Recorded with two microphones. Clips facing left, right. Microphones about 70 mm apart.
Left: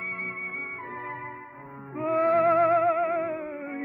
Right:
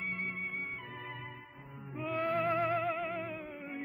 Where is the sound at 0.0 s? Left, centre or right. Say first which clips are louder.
Left 4 dB; left.